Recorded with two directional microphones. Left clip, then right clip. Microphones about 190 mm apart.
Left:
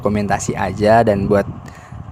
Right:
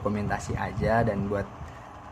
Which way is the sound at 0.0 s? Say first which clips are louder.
Left 11 dB; 50° left (ahead or behind).